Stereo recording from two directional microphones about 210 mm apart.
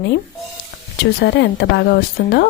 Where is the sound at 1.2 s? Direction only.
50° left (ahead or behind).